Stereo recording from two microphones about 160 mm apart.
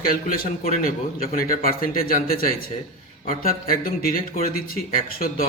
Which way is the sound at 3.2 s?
45° right (ahead or behind).